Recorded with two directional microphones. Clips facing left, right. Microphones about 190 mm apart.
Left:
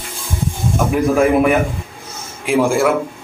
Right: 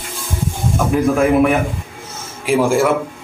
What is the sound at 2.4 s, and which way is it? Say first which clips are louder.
Speech: even; centre (ahead or behind).